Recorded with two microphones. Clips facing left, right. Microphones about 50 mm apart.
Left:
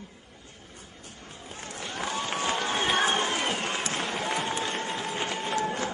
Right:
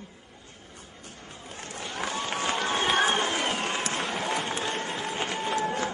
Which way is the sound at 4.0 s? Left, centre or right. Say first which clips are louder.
Even; centre.